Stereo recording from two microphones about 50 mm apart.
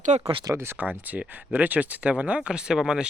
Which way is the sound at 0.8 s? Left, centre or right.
Right.